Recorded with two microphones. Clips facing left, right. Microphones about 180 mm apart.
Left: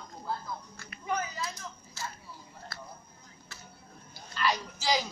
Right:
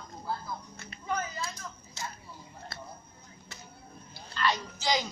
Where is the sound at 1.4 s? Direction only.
20° right (ahead or behind).